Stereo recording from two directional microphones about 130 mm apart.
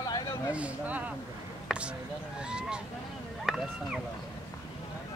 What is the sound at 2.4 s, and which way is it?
Speech, 5° right (ahead or behind).